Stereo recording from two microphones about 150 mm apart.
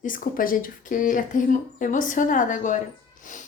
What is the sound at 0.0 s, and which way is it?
Speech, 65° left (ahead or behind).